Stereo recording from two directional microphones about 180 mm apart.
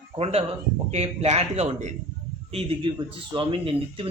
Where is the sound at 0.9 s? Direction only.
35° right (ahead or behind).